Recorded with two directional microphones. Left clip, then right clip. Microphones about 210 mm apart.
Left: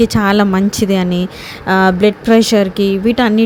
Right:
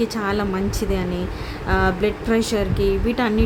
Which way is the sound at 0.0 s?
35° left (ahead or behind).